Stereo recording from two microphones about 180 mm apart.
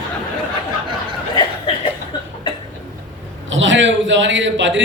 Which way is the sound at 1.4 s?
30° left (ahead or behind).